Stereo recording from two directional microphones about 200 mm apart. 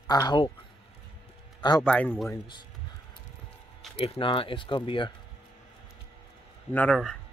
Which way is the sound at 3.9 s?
25° left (ahead or behind).